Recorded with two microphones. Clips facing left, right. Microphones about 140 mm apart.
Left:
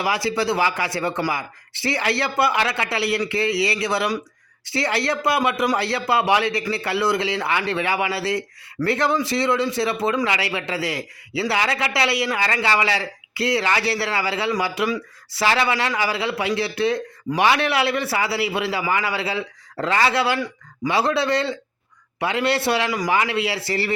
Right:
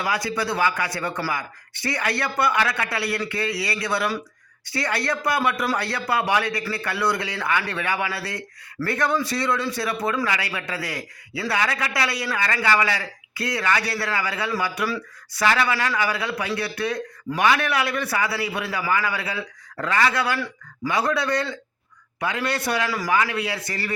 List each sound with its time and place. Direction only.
0.0 s a man's voice: 25° left (ahead or behind)